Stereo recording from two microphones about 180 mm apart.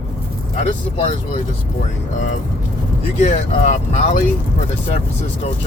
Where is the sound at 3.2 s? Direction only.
40° left (ahead or behind).